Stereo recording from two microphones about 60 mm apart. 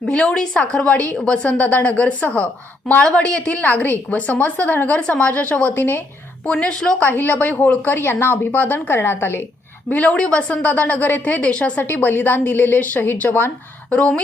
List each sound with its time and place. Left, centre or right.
0.0 s a woman's voice: centre; by 6.0 s left
6.4 s a woman's voice: centre
7.0 s a woman's voice: left
9.9 s a woman's voice: left